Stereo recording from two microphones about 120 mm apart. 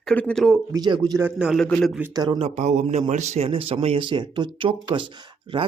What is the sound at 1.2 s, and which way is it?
Speech, 10° right (ahead or behind).